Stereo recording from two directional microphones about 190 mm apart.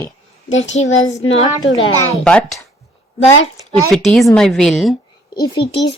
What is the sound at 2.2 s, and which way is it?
Speech, 5° left (ahead or behind).